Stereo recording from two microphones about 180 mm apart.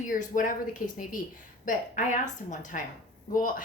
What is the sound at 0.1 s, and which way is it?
A woman's voice, 45° left (ahead or behind).